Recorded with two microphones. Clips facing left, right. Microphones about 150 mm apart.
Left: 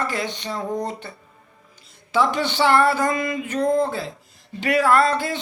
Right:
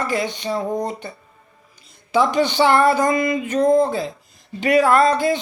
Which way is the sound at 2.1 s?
15° right (ahead or behind).